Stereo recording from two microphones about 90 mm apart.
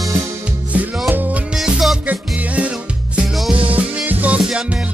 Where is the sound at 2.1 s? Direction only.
15° right (ahead or behind).